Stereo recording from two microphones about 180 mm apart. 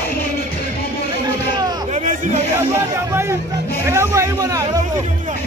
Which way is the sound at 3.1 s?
15° right (ahead or behind).